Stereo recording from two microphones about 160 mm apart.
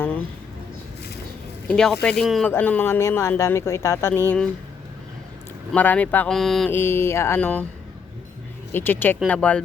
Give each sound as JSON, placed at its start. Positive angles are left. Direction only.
{"t": 1.6, "sound": "speech", "side_deg": 5}
{"t": 5.7, "sound": "speech", "side_deg": 10}
{"t": 6.7, "sound": "speech", "side_deg": 15}
{"t": 8.7, "sound": "speech", "side_deg": 10}